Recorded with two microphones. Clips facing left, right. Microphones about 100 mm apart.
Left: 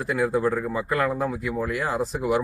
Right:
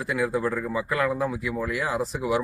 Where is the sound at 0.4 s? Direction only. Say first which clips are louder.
Left 3 dB; 15° left (ahead or behind).